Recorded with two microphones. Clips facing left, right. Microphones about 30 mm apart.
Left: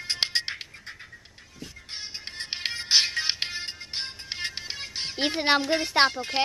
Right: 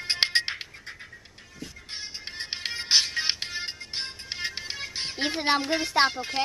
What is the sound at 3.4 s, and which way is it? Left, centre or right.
Music, left.